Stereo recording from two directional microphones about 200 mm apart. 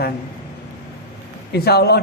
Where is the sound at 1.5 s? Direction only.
55° left (ahead or behind).